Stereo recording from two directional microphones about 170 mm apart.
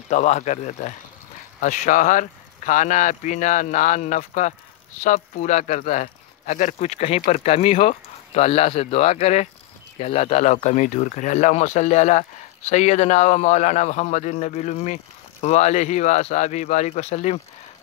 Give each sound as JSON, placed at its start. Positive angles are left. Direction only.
{"t": 0.1, "sound": "speech", "side_deg": 45}